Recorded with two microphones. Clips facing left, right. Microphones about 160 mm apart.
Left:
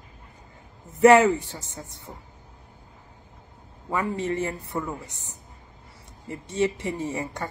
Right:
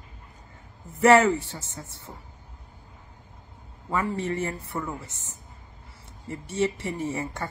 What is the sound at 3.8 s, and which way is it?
A woman's voice, 20° left (ahead or behind).